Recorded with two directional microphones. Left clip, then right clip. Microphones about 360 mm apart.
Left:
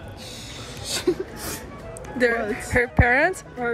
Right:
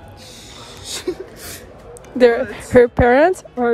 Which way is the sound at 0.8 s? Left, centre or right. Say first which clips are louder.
Left 2 dB; centre.